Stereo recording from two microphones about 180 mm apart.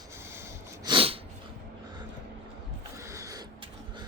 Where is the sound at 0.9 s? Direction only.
30° right (ahead or behind).